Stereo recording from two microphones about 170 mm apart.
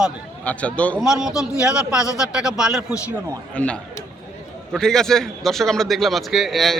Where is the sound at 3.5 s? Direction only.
5° left (ahead or behind).